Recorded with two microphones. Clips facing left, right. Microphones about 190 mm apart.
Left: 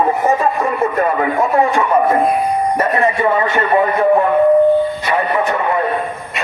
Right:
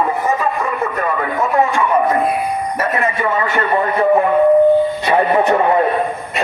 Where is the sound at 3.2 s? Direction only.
25° left (ahead or behind).